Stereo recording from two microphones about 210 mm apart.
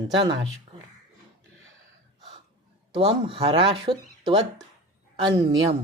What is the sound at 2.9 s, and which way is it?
Speech, 25° right (ahead or behind).